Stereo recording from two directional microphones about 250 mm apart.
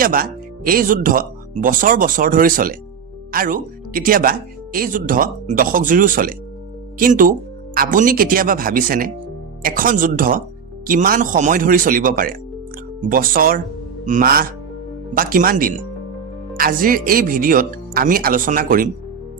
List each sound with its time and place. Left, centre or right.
0.0 s speech: right